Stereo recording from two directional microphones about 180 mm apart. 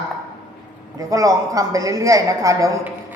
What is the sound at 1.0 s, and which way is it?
A woman's voice, 20° right (ahead or behind).